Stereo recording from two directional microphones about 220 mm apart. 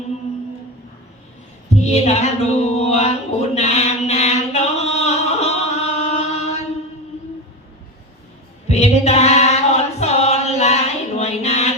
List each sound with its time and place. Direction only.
1.7 s music: 30° left (ahead or behind)
8.7 s choir: 30° left (ahead or behind)